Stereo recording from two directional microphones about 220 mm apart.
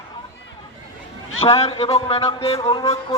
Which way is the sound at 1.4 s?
25° left (ahead or behind).